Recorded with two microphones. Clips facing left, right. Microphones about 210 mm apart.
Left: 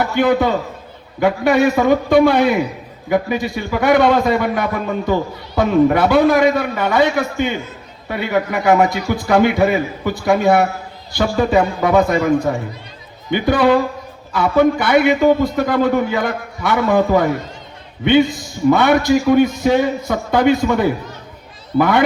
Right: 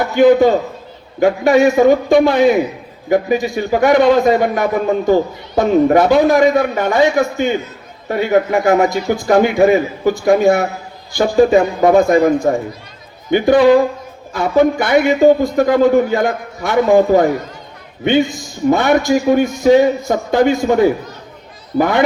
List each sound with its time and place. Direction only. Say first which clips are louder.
0.0 s a man's voice: right 6 dB; 50° right (ahead or behind)